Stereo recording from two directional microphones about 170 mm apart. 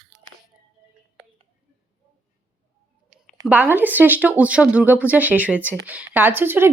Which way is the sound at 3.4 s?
10° right (ahead or behind).